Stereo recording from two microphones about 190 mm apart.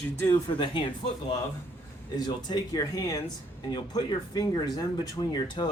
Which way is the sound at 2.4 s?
20° left (ahead or behind).